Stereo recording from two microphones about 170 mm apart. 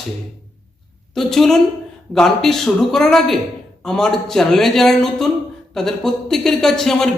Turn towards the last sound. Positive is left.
turn(degrees=5)  # may be behind; listen again after turning